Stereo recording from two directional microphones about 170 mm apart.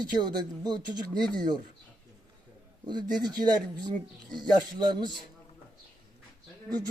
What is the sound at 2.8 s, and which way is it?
A man's voice, 25° right (ahead or behind).